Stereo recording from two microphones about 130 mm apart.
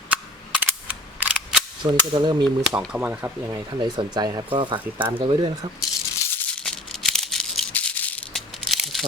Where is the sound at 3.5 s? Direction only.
35° right (ahead or behind).